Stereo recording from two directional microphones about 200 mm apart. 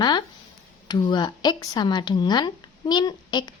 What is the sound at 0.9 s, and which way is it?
Speech, 20° left (ahead or behind).